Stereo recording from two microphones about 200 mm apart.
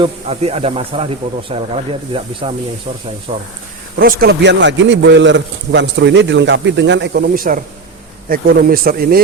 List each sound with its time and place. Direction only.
0.0 s speech: 30° right (ahead or behind)
3.9 s a man's voice: 50° right (ahead or behind)